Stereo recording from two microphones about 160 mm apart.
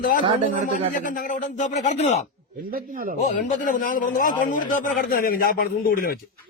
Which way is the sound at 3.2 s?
55° left (ahead or behind).